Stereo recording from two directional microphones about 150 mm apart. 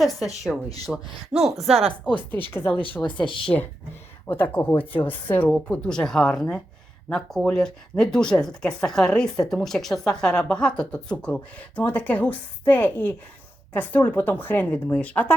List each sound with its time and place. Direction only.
0.5 s speech: centre (ahead or behind)
2.3 s speech: 15° left (ahead or behind)
3.0 s speech: 30° left (ahead or behind)
3.4 s speech: 10° left (ahead or behind)